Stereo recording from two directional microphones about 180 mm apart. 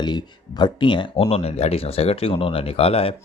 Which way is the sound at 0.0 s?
25° left (ahead or behind).